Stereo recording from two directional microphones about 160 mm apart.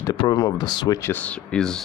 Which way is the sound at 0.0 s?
25° left (ahead or behind).